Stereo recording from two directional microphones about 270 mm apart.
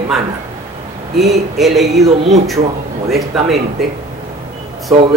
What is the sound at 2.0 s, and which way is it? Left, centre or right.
Speech, right.